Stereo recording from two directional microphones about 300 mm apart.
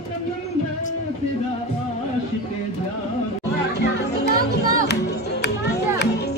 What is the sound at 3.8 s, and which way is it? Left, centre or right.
Music, left.